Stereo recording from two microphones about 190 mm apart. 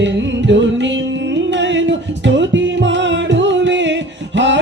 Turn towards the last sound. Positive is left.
turn(degrees=-70)  # may be behind; listen again after turning